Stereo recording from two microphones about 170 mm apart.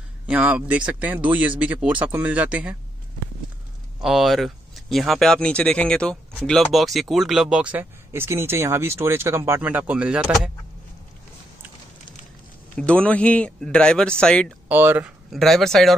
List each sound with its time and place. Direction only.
0.3 s speech: 10° right (ahead or behind)
4.0 s speech: centre (ahead or behind)
12.7 s speech: 5° left (ahead or behind)
14.7 s speech: 10° right (ahead or behind)
15.3 s speech: centre (ahead or behind)